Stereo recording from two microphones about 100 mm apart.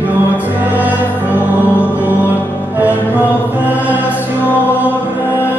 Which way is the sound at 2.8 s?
15° right (ahead or behind).